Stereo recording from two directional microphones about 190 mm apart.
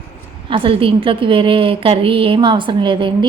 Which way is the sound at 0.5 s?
30° right (ahead or behind).